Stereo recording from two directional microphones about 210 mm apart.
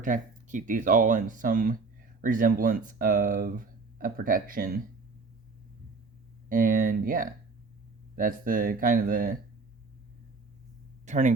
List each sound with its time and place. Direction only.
0.0 s speech: 35° right (ahead or behind)
6.5 s speech: 40° right (ahead or behind)
11.0 s speech: 35° right (ahead or behind)